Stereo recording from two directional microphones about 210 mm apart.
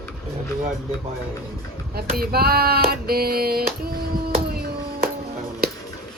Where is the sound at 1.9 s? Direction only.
45° right (ahead or behind).